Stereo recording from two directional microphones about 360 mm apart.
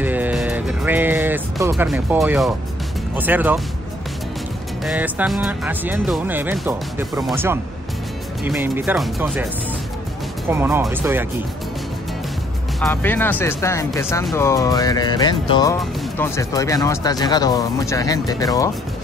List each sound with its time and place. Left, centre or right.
0.0 s music: centre
3.2 s speech: centre
4.8 s speech: centre
10.5 s speech: centre
12.8 s speech: centre